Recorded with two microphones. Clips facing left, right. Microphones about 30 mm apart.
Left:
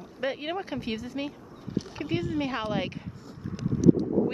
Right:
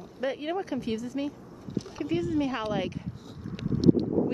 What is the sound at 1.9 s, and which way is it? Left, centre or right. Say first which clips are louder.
Dog: right 2 dB; left.